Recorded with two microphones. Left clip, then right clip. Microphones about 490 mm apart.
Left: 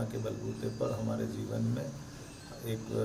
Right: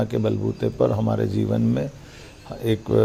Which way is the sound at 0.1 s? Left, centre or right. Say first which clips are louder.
Right 15 dB; right.